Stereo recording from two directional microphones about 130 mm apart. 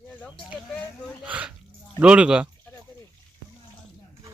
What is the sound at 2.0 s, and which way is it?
Speech, 10° right (ahead or behind).